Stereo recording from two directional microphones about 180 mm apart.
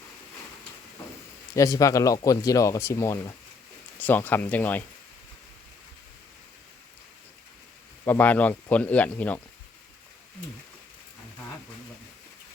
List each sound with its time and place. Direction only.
1.5 s speech: 20° left (ahead or behind)
8.0 s speech: 10° left (ahead or behind)